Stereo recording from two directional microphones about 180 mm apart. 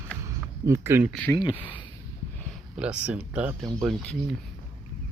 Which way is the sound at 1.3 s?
25° left (ahead or behind).